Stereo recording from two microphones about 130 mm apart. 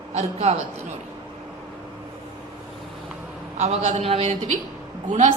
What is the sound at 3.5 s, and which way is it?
Speech, 60° right (ahead or behind).